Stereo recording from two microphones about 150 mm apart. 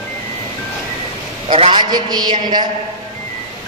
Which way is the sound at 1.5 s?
35° right (ahead or behind).